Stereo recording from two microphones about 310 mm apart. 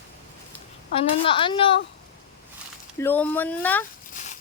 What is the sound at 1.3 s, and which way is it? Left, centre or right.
Speech, centre.